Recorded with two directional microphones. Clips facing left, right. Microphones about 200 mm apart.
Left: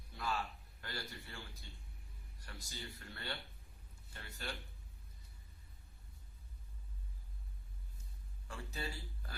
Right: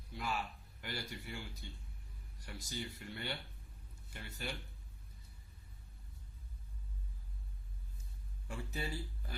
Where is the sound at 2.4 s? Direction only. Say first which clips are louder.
Right 6 dB; 15° right (ahead or behind).